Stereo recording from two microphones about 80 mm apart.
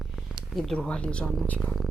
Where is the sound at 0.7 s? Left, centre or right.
Centre.